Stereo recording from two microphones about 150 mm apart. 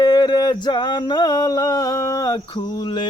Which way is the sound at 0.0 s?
25° left (ahead or behind).